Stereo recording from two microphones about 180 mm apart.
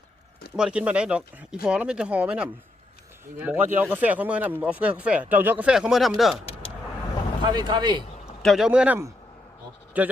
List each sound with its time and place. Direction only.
0.5 s speech: 5° right (ahead or behind)
7.4 s speech: 25° right (ahead or behind)
8.4 s speech: centre (ahead or behind)